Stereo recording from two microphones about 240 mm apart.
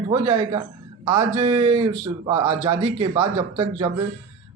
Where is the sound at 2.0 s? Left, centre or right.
Centre.